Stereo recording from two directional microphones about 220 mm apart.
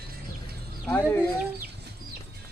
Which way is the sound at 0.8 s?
10° left (ahead or behind).